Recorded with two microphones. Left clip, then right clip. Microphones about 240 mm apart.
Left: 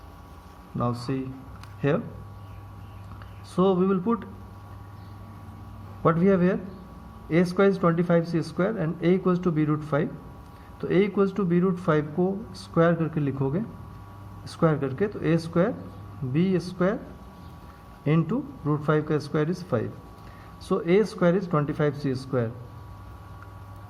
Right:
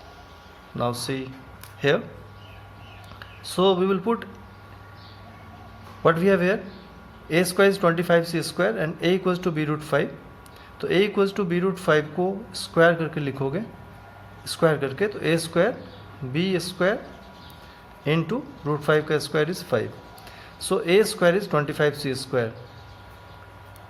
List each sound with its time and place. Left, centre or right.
0.8 s speech: right
3.4 s speech: right
6.0 s speech: right
18.0 s speech: right